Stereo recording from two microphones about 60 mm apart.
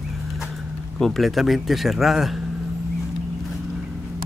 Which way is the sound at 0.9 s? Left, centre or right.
Centre.